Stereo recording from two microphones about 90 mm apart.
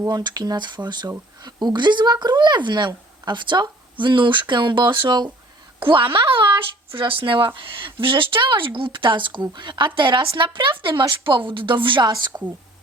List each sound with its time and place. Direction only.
0.1 s speech: 55° right (ahead or behind)
5.8 s speech: 70° right (ahead or behind)